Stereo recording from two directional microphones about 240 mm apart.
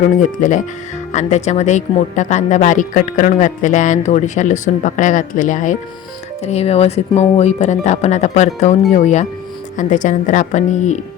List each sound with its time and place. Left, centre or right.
0.2 s speech: left